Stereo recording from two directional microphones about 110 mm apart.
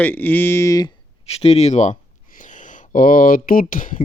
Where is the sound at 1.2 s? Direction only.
65° left (ahead or behind); by 1.9 s 85° left.